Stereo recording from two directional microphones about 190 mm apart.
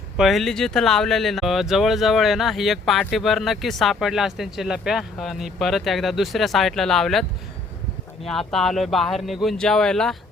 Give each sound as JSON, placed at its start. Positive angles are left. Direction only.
{"t": 0.2, "sound": "speech", "side_deg": 0}
{"t": 8.3, "sound": "speech", "side_deg": 0}